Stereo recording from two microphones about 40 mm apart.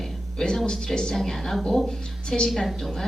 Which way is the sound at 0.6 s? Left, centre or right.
Centre.